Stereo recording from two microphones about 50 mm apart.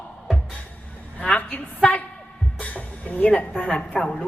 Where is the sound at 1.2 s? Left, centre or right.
Left.